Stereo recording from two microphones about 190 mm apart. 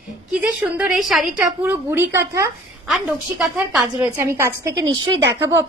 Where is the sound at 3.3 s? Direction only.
Centre (ahead or behind).